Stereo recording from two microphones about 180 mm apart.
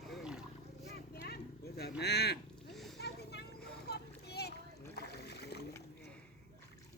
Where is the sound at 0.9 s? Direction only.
65° left (ahead or behind).